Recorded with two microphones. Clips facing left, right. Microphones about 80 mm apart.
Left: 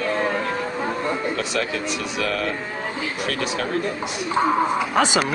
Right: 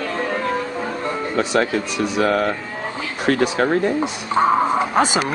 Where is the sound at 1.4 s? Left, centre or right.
Right.